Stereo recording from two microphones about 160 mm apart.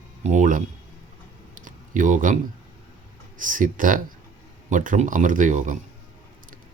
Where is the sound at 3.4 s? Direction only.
55° right (ahead or behind).